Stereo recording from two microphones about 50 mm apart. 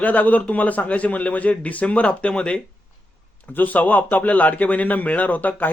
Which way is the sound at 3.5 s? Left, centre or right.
Left.